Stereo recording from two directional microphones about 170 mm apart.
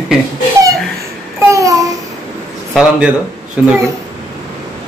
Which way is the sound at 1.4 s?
20° right (ahead or behind).